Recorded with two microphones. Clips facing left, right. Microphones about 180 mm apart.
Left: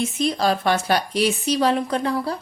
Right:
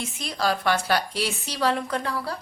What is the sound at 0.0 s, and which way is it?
A woman's voice, 20° left (ahead or behind).